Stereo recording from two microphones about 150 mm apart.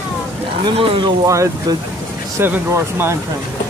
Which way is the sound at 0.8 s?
35° right (ahead or behind).